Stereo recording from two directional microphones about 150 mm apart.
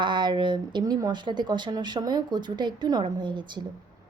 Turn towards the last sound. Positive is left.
turn(degrees=-30)  # may be behind; listen again after turning